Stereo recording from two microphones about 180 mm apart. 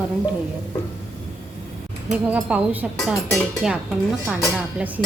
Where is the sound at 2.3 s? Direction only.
10° right (ahead or behind).